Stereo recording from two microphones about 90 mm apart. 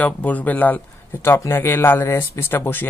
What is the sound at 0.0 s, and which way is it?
Speech, 20° left (ahead or behind).